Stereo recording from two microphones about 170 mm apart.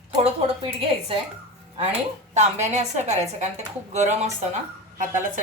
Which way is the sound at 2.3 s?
40° right (ahead or behind).